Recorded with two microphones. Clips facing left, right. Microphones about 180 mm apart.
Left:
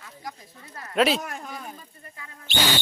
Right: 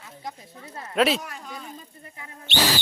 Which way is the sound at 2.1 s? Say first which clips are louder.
Right 3 dB; 20° right (ahead or behind).